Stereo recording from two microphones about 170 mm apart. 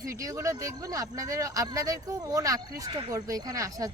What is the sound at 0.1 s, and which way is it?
Speech, 20° right (ahead or behind).